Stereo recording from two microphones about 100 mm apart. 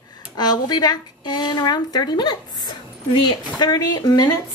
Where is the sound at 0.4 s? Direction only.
45° left (ahead or behind).